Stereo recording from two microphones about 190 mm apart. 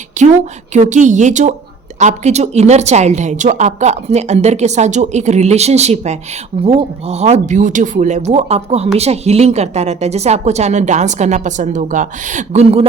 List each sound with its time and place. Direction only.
0.2 s a woman's voice: 40° right (ahead or behind)